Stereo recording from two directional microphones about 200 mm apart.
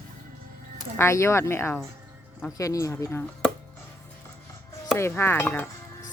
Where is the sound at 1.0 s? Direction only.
15° left (ahead or behind).